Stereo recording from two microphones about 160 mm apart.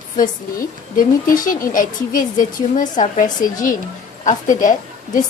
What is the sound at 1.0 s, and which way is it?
A woman's voice, 60° left (ahead or behind).